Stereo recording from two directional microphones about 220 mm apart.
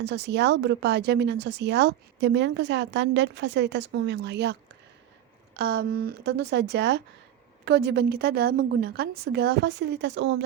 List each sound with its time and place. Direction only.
0.0 s speech: 50° right (ahead or behind)
5.5 s speech: 45° right (ahead or behind)